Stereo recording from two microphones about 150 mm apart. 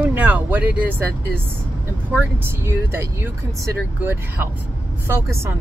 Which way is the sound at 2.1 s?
15° right (ahead or behind).